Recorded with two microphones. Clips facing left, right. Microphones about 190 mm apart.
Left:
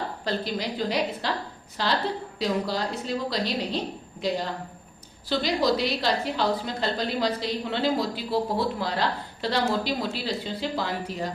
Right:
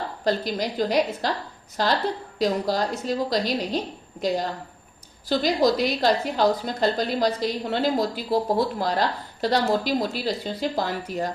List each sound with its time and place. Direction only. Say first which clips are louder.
0.3 s a woman's voice: right 5 dB; 45° right (ahead or behind)
5.4 s a woman's voice: right 3 dB; 45° right (ahead or behind)